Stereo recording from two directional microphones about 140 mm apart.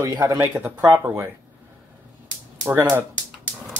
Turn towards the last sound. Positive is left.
turn(degrees=-15)  # may be behind; listen again after turning